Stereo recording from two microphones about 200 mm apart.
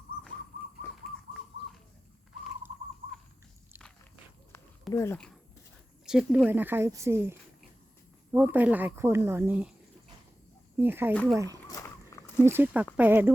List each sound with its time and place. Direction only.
4.9 s speech: 10° left (ahead or behind); by 9.7 s 5° right (ahead or behind)
10.8 s speech: 10° right (ahead or behind)
11.7 s boat: 15° left (ahead or behind)
12.4 s speech: 10° right (ahead or behind)